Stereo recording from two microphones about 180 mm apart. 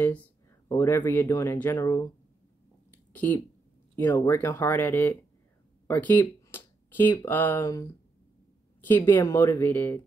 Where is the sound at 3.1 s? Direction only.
10° left (ahead or behind).